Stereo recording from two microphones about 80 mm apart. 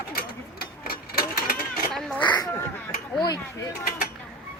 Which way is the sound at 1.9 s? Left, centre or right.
Centre.